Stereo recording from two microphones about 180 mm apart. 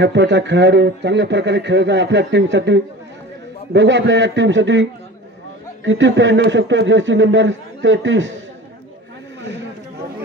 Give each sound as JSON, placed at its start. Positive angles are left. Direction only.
{"t": 0.0, "sound": "a man's voice", "side_deg": -75}
{"t": 5.9, "sound": "speech", "side_deg": -90}